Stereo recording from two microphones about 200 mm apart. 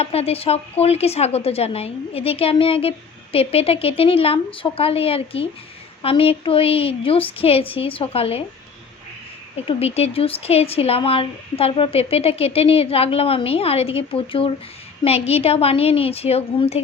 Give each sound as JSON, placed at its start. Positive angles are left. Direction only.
{"t": 0.0, "sound": "a woman's voice", "side_deg": 30}
{"t": 9.6, "sound": "a woman's voice", "side_deg": 30}